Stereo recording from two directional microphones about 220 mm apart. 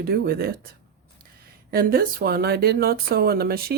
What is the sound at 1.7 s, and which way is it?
Speech, 40° right (ahead or behind).